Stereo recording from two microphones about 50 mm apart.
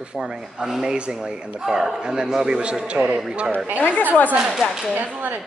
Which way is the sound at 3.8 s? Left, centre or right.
Left.